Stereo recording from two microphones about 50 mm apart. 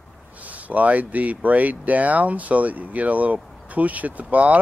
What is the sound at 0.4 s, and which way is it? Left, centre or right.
Speech, right.